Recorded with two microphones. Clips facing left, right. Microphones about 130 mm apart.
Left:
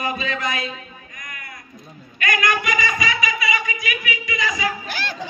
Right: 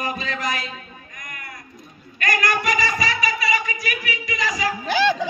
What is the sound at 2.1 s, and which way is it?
Speech, 40° right (ahead or behind).